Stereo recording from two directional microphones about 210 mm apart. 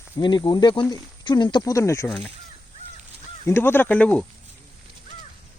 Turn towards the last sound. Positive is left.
turn(degrees=5)  # may be behind; listen again after turning